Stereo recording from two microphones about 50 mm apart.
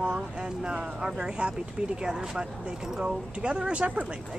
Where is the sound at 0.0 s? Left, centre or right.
Right.